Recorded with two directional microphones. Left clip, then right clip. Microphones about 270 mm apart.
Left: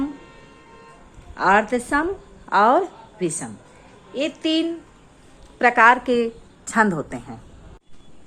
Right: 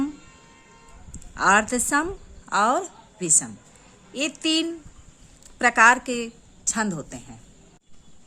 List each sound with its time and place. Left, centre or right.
1.4 s a woman's voice: centre